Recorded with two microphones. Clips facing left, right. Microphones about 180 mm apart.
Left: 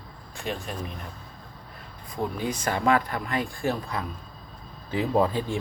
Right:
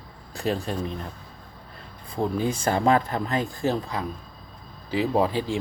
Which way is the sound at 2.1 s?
30° right (ahead or behind).